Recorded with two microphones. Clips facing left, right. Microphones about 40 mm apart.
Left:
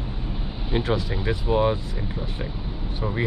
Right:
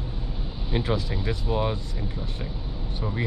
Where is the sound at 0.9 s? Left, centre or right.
Centre.